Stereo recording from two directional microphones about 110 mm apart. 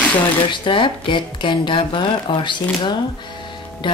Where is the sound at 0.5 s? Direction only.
50° left (ahead or behind).